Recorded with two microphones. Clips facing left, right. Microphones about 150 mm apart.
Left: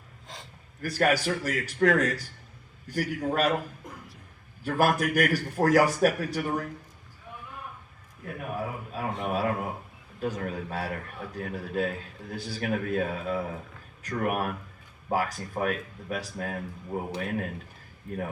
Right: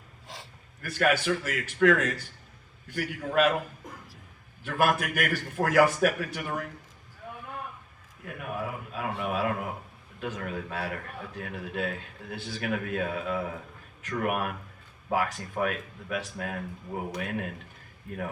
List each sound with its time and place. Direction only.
0.8 s a man's voice: 40° left (ahead or behind)
3.8 s a sound: centre (ahead or behind)
4.6 s a man's voice: 40° left (ahead or behind)
8.2 s a man's voice: 40° left (ahead or behind)